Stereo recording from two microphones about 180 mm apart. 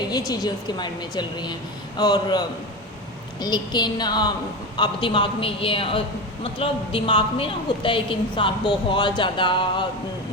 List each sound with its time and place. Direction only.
0.1 s a woman's voice: 20° left (ahead or behind)
3.4 s a woman's voice: 25° left (ahead or behind)